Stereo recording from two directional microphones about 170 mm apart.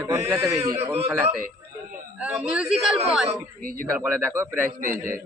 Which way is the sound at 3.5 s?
55° right (ahead or behind).